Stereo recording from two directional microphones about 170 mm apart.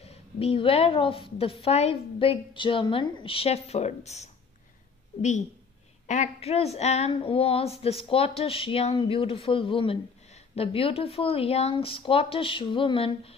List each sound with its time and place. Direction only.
0.0 s speech: 35° left (ahead or behind)
6.0 s speech: 45° left (ahead or behind)